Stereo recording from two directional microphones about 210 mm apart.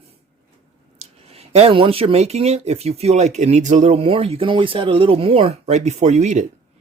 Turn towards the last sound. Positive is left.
turn(degrees=-35)  # may be behind; listen again after turning